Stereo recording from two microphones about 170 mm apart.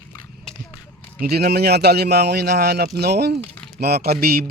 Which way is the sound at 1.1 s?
70° right (ahead or behind).